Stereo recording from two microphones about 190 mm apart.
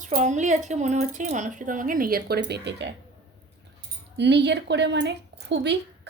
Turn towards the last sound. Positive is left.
turn(degrees=-65)  # may be behind; listen again after turning